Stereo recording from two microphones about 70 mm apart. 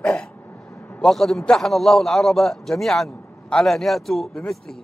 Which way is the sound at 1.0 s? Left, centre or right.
Centre.